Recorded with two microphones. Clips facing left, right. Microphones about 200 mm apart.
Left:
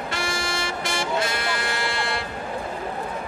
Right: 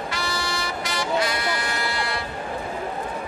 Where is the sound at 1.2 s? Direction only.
25° left (ahead or behind).